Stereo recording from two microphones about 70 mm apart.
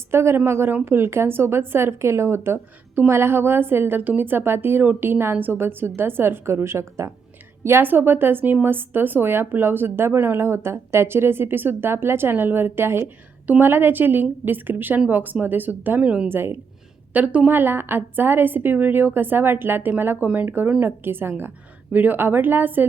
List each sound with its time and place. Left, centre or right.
0.1 s a woman's voice: right; by 16.3 s centre
16.3 s speech: right
17.2 s a woman's voice: right
17.5 s a woman's voice: right